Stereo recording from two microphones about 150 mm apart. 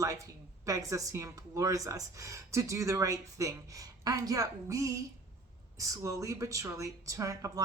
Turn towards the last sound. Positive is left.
turn(degrees=-20)  # may be behind; listen again after turning